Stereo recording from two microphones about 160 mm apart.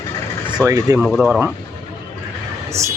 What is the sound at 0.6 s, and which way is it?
Speech, 20° right (ahead or behind).